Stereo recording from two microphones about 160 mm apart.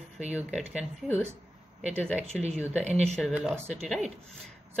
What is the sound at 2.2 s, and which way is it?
Speech, 45° right (ahead or behind).